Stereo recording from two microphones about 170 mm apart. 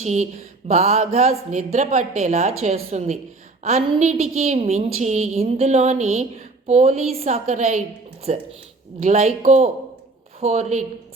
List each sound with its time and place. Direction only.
0.0 s speech: 40° right (ahead or behind)